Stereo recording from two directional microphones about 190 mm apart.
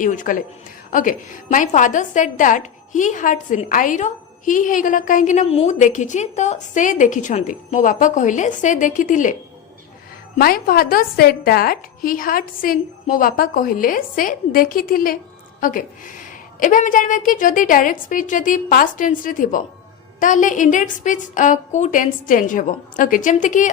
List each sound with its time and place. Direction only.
0.0 s a woman's voice: 45° left (ahead or behind)
10.3 s a woman's voice: 50° left (ahead or behind)